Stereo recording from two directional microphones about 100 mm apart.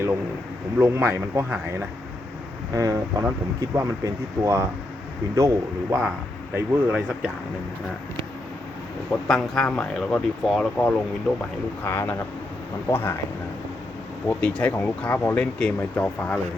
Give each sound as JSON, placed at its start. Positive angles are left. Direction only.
{"t": 0.8, "sound": "speech", "side_deg": -25}
{"t": 2.7, "sound": "speech", "side_deg": -30}
{"t": 6.5, "sound": "speech", "side_deg": -10}
{"t": 9.2, "sound": "speech", "side_deg": 5}
{"t": 11.9, "sound": "speech", "side_deg": 25}
{"t": 14.3, "sound": "speech", "side_deg": 15}